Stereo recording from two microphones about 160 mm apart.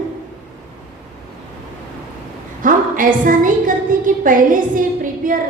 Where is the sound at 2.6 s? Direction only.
55° right (ahead or behind).